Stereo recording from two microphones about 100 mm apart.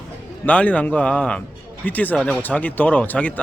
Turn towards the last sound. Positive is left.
turn(degrees=15)  # may be behind; listen again after turning